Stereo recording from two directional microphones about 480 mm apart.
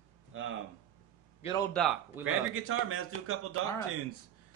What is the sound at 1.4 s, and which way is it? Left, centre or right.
Speech, centre.